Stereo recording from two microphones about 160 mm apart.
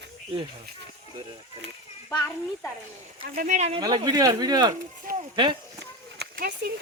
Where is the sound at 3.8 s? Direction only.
25° right (ahead or behind).